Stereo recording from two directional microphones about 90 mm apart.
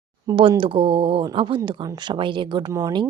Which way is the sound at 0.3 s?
70° right (ahead or behind).